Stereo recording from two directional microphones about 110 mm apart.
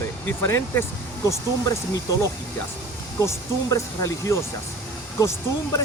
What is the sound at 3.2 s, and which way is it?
Speech, 30° left (ahead or behind).